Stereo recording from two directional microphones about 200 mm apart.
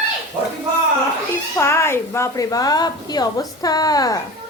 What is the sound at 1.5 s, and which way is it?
A woman's voice, 15° left (ahead or behind).